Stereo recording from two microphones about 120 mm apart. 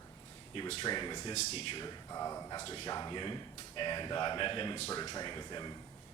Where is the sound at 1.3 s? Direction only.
60° left (ahead or behind); by 1.9 s 45° left (ahead or behind).